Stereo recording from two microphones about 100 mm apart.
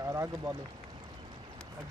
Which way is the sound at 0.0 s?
30° right (ahead or behind).